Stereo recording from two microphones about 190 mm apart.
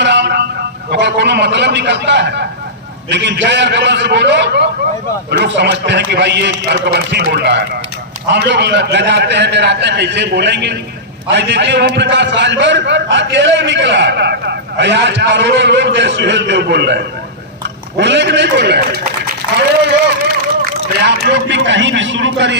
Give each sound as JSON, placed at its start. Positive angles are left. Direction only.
{"t": 0.0, "sound": "vehicle", "side_deg": -70}
{"t": 0.9, "sound": "a man's voice", "side_deg": -65}
{"t": 19.5, "sound": "a sound", "side_deg": -60}